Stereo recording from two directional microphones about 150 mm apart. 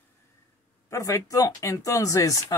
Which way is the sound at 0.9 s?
20° left (ahead or behind).